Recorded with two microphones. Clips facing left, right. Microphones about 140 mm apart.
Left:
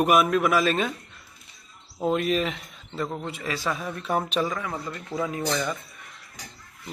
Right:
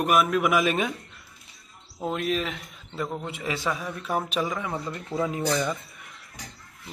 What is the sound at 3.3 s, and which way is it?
Speech, 15° right (ahead or behind).